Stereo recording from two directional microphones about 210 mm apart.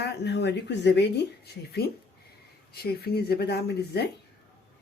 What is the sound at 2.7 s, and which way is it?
Speech, 50° left (ahead or behind).